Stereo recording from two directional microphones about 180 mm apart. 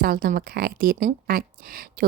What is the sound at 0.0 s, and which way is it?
Speech, 55° right (ahead or behind).